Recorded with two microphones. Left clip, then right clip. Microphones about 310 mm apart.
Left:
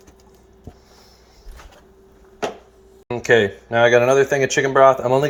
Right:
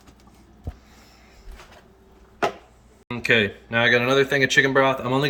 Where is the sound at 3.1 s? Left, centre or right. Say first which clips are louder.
Left 4 dB; centre.